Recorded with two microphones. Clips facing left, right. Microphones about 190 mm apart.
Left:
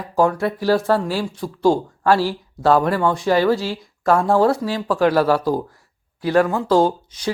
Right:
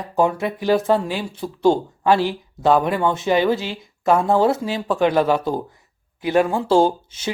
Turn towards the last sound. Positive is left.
turn(degrees=-25)  # may be behind; listen again after turning